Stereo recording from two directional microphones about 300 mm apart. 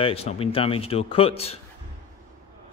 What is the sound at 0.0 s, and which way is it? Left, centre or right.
Speech, centre.